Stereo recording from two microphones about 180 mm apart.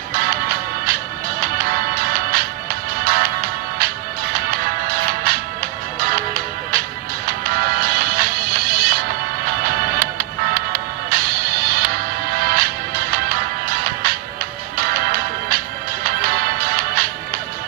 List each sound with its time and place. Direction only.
0.1 s music: 55° right (ahead or behind)